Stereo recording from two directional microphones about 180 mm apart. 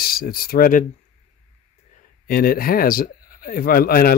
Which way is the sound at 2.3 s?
55° left (ahead or behind).